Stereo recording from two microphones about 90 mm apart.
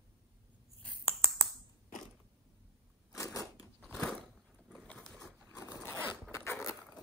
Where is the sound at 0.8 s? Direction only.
10° left (ahead or behind).